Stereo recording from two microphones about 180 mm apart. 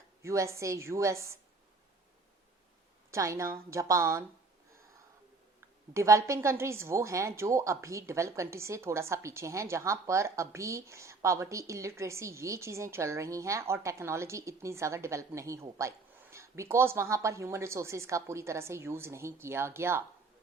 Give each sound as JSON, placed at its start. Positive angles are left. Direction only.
{"t": 0.2, "sound": "a woman's voice", "side_deg": -15}
{"t": 3.1, "sound": "a woman's voice", "side_deg": -20}
{"t": 5.5, "sound": "a woman's voice", "side_deg": -15}